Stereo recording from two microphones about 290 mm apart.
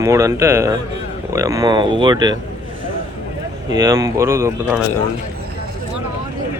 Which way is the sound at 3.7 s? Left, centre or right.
Centre.